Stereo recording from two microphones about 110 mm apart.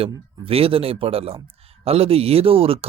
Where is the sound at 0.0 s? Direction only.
60° right (ahead or behind).